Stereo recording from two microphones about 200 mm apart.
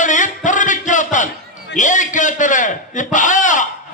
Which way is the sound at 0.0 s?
40° left (ahead or behind).